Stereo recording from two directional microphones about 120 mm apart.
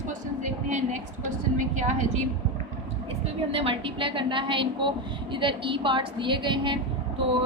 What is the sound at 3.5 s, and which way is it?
A woman's voice, 50° right (ahead or behind).